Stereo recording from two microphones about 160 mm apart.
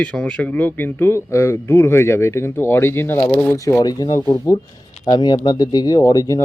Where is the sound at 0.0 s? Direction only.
5° left (ahead or behind).